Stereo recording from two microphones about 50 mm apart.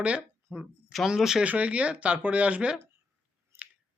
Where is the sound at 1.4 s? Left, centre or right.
Right.